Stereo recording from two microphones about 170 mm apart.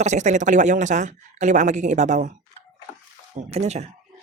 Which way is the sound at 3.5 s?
40° right (ahead or behind).